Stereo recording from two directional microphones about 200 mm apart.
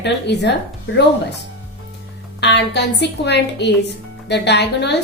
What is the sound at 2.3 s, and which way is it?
A woman's voice, 60° left (ahead or behind).